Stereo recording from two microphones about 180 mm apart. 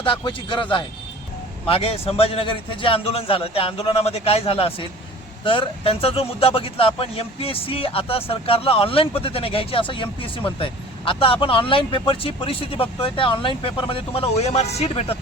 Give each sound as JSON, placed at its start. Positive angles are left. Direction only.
{"t": 0.0, "sound": "speech", "side_deg": 30}